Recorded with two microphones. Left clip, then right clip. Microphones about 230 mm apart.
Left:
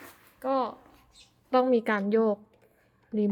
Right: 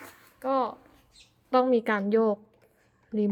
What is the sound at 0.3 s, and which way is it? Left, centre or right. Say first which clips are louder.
A woman's voice: right 1 dB; centre.